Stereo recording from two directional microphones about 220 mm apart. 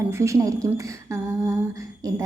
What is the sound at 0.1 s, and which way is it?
A woman's voice, 15° right (ahead or behind).